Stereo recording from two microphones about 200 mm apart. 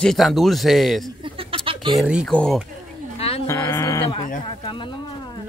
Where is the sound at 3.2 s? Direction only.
30° left (ahead or behind).